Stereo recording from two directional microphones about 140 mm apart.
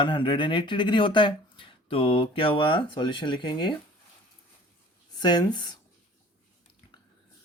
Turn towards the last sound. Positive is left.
turn(degrees=30)  # may be behind; listen again after turning